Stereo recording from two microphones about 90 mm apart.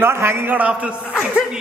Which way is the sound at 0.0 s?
25° right (ahead or behind).